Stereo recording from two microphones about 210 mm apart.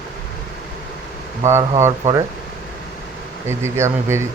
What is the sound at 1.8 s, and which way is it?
Speech, 15° right (ahead or behind).